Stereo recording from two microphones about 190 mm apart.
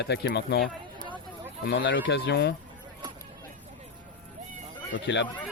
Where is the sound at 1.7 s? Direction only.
70° left (ahead or behind).